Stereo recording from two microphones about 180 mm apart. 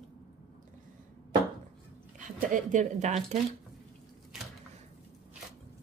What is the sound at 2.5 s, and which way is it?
Speech, 45° right (ahead or behind).